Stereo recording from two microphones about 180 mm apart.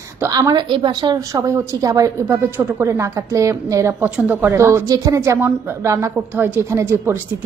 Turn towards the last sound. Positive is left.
turn(degrees=-15)  # may be behind; listen again after turning